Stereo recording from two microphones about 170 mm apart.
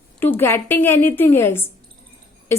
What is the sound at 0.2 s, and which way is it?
A woman's voice, 10° left (ahead or behind).